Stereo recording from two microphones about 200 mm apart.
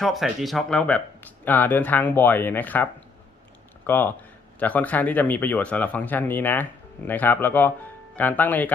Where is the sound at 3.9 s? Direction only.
10° left (ahead or behind).